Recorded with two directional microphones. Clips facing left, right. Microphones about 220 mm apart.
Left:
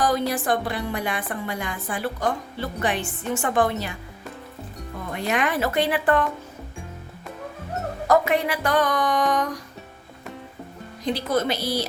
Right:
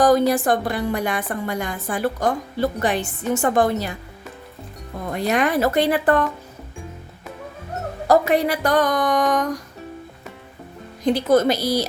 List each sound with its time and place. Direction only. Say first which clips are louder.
0.0 s a woman's voice: right 7 dB; 45° right (ahead or behind)
5.1 s a woman's voice: right 5 dB; 40° right (ahead or behind)
8.0 s a woman's voice: right 3 dB; 35° right (ahead or behind)
11.0 s a woman's voice: right 7 dB; 50° right (ahead or behind)